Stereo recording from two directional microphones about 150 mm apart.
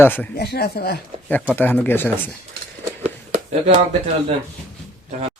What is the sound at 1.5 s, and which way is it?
Speech, 5° left (ahead or behind).